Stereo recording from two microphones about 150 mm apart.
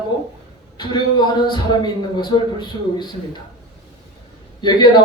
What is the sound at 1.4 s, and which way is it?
A man's voice, 30° left (ahead or behind).